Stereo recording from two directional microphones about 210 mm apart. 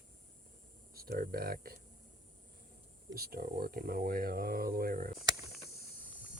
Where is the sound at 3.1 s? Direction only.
45° right (ahead or behind).